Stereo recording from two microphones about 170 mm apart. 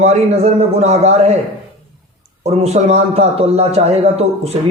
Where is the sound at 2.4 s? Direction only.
40° right (ahead or behind).